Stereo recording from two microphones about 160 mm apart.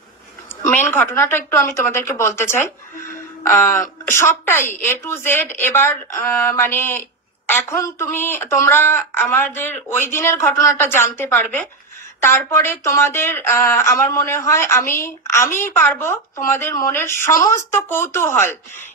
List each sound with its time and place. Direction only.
0.7 s a woman's voice: 15° left (ahead or behind)